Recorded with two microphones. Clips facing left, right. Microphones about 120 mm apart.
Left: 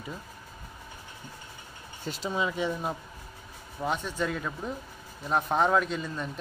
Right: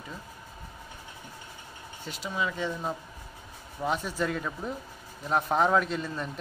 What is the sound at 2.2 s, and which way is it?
Speech, 25° left (ahead or behind).